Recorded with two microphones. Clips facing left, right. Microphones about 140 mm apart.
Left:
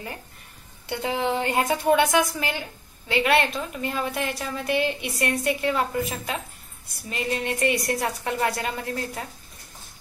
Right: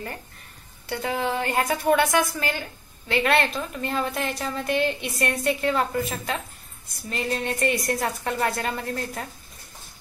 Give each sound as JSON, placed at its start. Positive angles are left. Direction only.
{"t": 0.8, "sound": "a woman's voice", "side_deg": 20}